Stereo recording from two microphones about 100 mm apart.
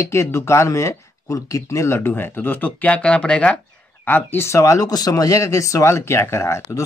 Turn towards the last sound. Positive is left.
turn(degrees=30)  # may be behind; listen again after turning